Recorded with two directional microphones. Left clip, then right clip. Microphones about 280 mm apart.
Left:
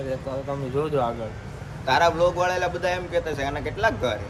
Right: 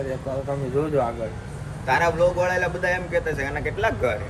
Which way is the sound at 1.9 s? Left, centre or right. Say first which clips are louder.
Even; centre.